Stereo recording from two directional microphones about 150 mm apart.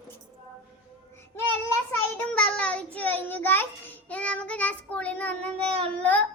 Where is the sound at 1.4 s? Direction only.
15° left (ahead or behind).